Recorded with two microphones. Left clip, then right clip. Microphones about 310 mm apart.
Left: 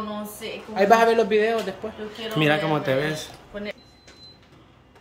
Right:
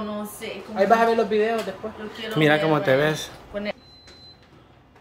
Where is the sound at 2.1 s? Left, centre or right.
Centre.